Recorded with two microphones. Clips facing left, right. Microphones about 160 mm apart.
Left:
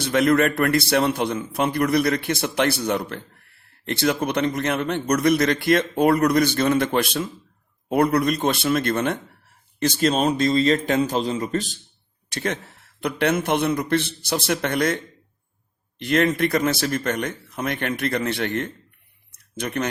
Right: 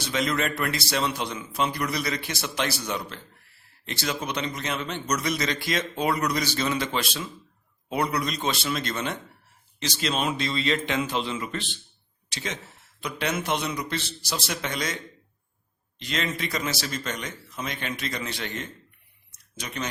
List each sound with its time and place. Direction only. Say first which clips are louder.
0.0 s a man's voice: left 9 dB; 55° left (ahead or behind); by 11.8 s 40° left (ahead or behind)
12.3 s a man's voice: left 8 dB; 60° left (ahead or behind)